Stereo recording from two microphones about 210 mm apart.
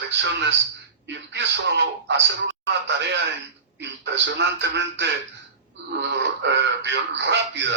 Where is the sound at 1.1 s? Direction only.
55° right (ahead or behind).